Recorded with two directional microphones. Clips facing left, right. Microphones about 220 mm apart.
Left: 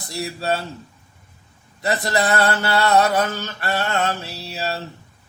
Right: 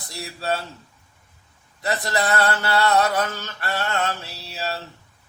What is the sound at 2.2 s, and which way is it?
Mantra, 25° left (ahead or behind).